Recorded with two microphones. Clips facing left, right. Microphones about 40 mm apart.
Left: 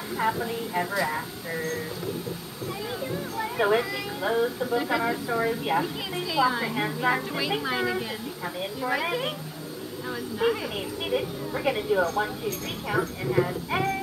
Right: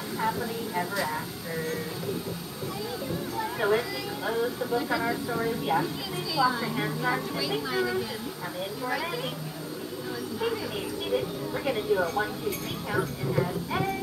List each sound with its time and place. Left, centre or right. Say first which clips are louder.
0.2 s speech: left 3 dB; left
3.3 s speech: left 3 dB; centre
10.4 s speech: left 5 dB; left